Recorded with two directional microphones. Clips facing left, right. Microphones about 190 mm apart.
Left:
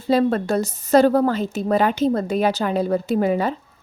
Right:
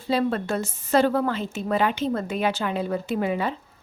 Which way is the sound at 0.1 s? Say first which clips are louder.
Left 5 dB; 40° left (ahead or behind).